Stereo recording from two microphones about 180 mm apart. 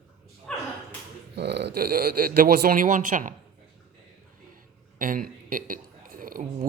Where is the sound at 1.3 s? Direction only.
70° right (ahead or behind); by 3.3 s 45° right (ahead or behind).